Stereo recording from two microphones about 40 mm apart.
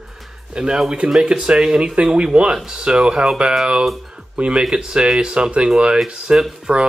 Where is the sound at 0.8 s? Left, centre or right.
Right.